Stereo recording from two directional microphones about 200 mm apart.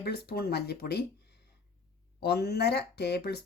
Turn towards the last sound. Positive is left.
turn(degrees=55)  # may be behind; listen again after turning